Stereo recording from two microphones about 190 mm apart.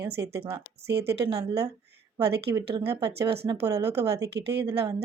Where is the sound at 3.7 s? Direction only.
15° right (ahead or behind).